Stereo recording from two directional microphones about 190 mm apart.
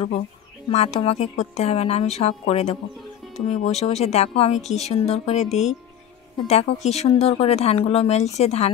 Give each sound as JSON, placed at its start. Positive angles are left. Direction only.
{"t": 0.7, "sound": "speech", "side_deg": 35}